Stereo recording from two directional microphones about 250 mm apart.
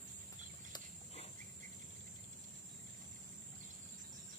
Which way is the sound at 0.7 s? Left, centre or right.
Left.